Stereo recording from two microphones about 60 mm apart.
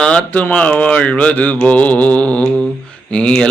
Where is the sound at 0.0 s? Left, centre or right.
Centre.